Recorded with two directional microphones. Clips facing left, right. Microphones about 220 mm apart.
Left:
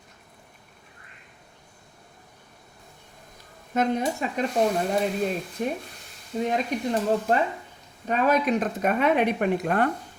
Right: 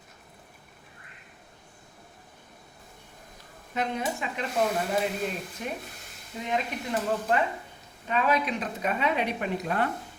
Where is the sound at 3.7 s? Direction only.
45° left (ahead or behind).